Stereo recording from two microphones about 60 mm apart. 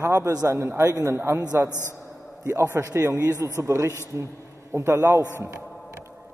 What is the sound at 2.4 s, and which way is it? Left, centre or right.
A man's voice, right.